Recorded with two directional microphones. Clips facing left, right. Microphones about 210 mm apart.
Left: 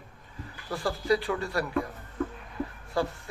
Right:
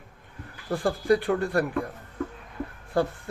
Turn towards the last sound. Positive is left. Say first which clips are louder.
# right 4 dB
turn(degrees=-55)  # may be behind; listen again after turning